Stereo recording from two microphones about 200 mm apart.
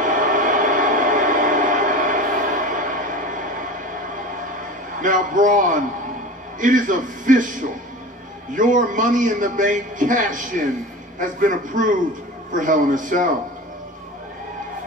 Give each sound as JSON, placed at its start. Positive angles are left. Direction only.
{"t": 0.0, "sound": "a sound", "side_deg": -40}
{"t": 5.0, "sound": "a man's voice", "side_deg": -40}
{"t": 8.5, "sound": "a man's voice", "side_deg": -40}